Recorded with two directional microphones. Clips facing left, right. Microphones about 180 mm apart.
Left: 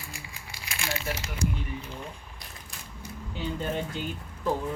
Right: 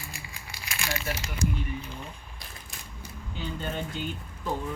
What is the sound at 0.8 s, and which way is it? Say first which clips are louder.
Crumpling: even; 25° left (ahead or behind).